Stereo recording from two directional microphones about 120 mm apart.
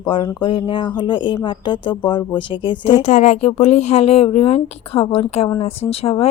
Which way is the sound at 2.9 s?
70° left (ahead or behind).